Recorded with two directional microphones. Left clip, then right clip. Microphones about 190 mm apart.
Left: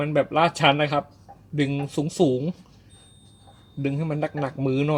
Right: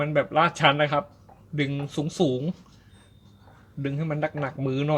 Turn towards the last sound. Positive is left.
turn(degrees=30)  # may be behind; listen again after turning